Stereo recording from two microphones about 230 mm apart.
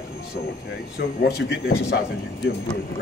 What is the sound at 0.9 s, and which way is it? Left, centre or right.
A man's voice, left.